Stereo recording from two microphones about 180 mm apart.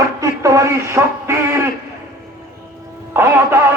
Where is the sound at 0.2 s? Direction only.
15° right (ahead or behind).